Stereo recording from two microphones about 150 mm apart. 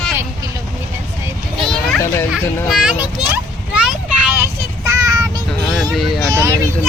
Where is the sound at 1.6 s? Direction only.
Centre (ahead or behind).